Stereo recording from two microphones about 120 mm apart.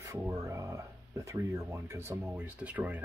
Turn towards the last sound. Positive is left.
turn(degrees=-10)  # may be behind; listen again after turning